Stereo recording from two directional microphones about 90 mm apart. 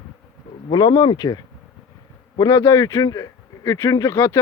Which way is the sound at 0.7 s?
50° left (ahead or behind).